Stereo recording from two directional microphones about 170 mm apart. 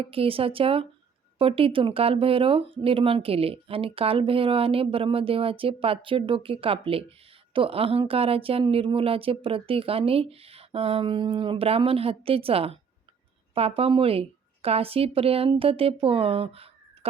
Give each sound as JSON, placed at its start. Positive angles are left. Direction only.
{"t": 0.0, "sound": "a woman's voice", "side_deg": -35}